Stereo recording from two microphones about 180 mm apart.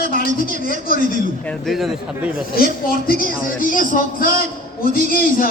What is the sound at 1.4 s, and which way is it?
Speech, centre (ahead or behind).